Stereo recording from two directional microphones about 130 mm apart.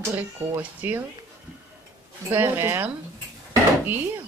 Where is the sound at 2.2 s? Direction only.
20° right (ahead or behind).